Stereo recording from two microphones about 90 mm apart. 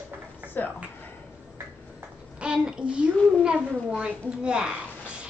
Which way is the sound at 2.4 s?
10° right (ahead or behind).